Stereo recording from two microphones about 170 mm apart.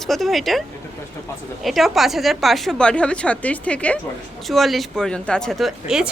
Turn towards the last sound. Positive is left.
turn(degrees=0)  # may be behind; listen again after turning